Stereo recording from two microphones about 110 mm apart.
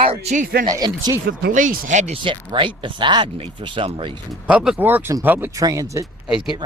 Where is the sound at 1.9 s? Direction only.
90° right.